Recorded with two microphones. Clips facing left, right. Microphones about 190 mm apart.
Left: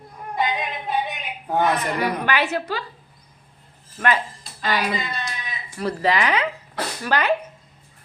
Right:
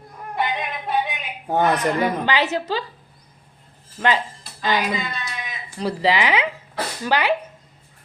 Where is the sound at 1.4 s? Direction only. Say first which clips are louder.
Right 2 dB; 25° right (ahead or behind).